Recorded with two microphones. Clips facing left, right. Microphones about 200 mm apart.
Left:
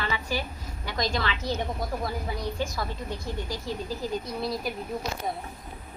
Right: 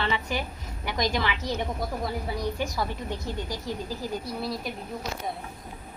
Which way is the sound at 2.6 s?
15° right (ahead or behind).